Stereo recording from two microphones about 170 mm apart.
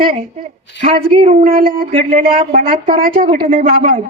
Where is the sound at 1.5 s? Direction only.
55° right (ahead or behind).